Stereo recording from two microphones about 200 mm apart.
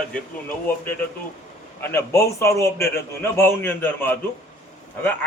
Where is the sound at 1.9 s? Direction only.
15° left (ahead or behind).